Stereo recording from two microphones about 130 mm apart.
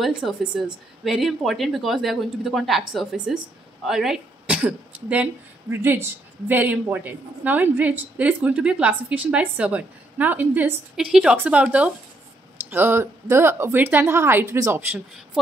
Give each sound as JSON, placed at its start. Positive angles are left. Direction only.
{"t": 0.0, "sound": "a woman's voice", "side_deg": -5}